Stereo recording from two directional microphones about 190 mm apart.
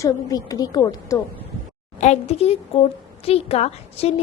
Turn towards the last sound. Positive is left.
turn(degrees=30)  # may be behind; listen again after turning